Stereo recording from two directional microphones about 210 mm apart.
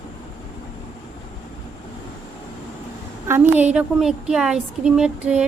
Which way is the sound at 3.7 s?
Centre (ahead or behind).